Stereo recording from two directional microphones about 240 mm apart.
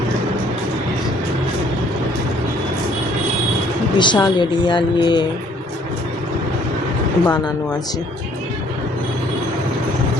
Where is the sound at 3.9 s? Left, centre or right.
Centre.